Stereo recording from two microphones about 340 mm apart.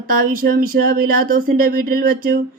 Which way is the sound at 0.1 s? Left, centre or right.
Right.